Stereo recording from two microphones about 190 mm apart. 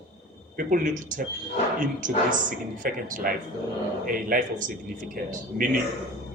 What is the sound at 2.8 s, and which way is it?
Speech, 45° right (ahead or behind).